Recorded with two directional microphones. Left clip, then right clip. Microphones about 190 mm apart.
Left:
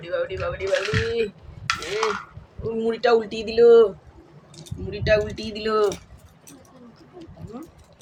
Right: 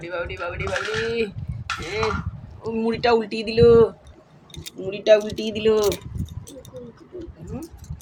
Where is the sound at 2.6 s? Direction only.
Centre (ahead or behind).